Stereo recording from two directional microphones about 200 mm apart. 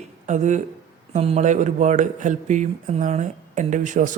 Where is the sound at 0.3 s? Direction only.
35° right (ahead or behind).